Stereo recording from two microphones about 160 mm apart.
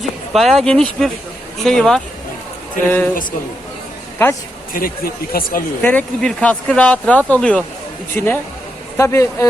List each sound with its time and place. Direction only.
0.0 s speech: centre (ahead or behind)
4.7 s speech: 65° left (ahead or behind)
5.8 s speech: 10° left (ahead or behind)